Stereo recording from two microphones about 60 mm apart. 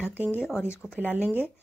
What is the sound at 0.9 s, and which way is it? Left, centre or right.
Speech, right.